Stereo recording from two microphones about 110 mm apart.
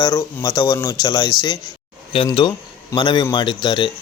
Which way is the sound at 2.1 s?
60° left (ahead or behind).